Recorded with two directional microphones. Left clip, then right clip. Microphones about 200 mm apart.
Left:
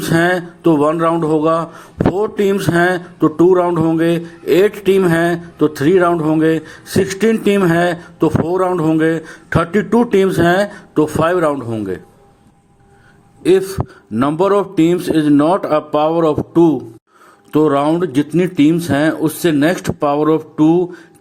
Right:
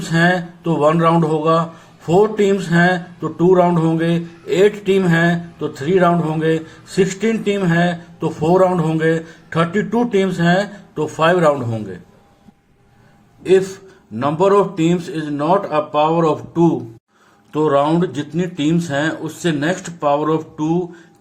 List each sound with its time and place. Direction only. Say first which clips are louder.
0.0 s speech: left 2 dB; 55° left (ahead or behind)
13.4 s a man's voice: left 2 dB; 45° left (ahead or behind)